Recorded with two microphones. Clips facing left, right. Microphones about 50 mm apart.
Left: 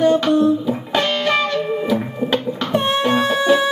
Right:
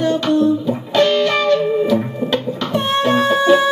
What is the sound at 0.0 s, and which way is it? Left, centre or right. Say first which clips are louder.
Music: left 1 dB; centre.